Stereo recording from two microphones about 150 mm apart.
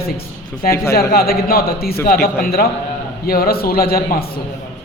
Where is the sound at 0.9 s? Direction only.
85° left.